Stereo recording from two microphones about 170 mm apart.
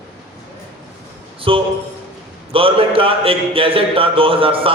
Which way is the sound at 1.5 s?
30° right (ahead or behind).